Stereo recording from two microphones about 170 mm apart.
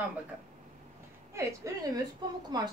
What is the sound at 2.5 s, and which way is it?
Speech, 25° right (ahead or behind).